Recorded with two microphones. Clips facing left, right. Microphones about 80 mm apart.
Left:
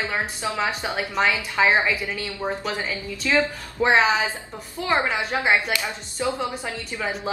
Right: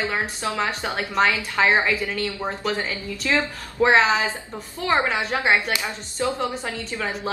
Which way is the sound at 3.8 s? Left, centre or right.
Centre.